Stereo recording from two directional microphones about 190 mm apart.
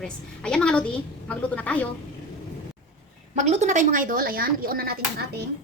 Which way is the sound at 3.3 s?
40° right (ahead or behind).